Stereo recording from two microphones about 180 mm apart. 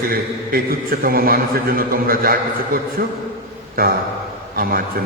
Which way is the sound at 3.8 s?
55° right (ahead or behind).